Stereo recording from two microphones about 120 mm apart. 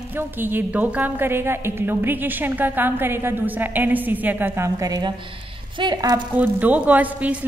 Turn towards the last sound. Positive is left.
turn(degrees=-15)  # may be behind; listen again after turning